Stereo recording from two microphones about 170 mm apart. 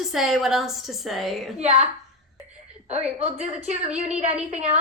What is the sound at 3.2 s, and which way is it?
A woman's voice, 40° right (ahead or behind).